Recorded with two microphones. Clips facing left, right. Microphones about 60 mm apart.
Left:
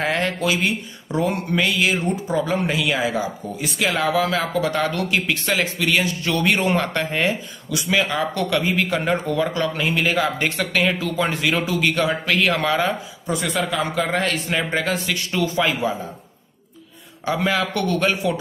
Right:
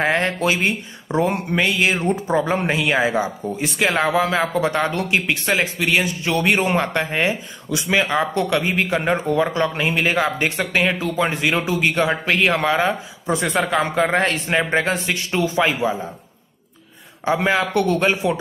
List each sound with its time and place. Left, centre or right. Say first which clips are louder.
0.0 s speech: right 3 dB; right
17.2 s speech: right 2 dB; right